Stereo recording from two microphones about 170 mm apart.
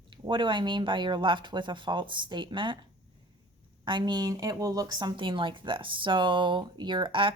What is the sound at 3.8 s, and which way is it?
Speech, 25° right (ahead or behind).